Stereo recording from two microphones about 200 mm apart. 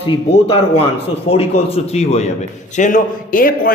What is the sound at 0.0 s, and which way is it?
A man's voice, 30° left (ahead or behind).